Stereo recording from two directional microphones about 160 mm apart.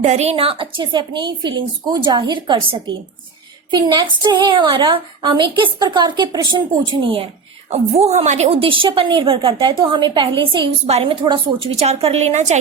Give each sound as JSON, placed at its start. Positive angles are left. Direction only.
{"t": 0.0, "sound": "a woman's voice", "side_deg": -45}